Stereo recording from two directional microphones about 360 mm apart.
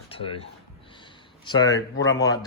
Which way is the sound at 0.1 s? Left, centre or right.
Centre.